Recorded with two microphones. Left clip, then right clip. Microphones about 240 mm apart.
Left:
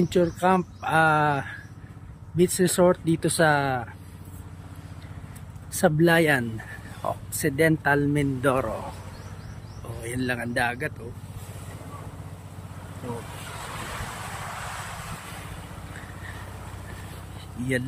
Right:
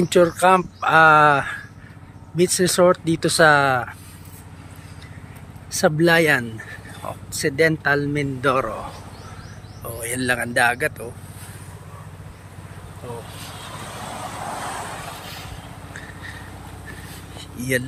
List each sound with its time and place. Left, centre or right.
0.1 s speech: centre
5.8 s speech: centre
10.0 s speech: centre